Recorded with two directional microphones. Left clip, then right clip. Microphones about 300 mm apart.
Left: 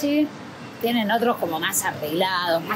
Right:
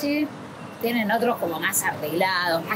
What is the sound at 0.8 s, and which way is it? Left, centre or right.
Speech, centre.